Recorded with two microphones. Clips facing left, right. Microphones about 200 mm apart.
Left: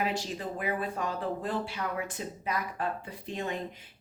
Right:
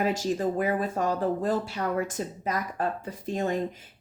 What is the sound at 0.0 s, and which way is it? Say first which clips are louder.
Speech: right 7 dB; 45° right (ahead or behind).